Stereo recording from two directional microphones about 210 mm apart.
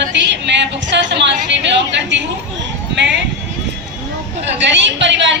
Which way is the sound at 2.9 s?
55° right (ahead or behind).